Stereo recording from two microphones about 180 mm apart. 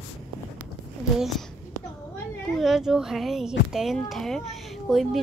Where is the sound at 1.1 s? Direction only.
Centre (ahead or behind).